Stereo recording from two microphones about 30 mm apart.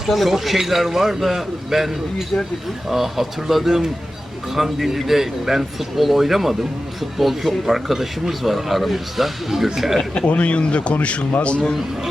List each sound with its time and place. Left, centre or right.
0.1 s a man's voice: centre
10.2 s speech: left